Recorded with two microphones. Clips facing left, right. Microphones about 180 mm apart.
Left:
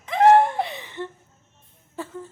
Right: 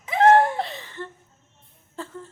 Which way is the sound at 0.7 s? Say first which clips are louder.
Left 3 dB; 20° left (ahead or behind).